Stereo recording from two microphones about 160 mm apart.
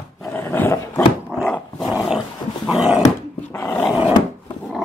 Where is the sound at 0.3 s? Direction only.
15° left (ahead or behind).